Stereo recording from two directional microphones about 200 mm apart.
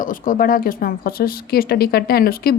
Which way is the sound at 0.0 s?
45° left (ahead or behind).